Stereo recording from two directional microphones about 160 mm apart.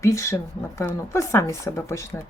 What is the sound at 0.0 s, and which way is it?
Speech, 20° left (ahead or behind).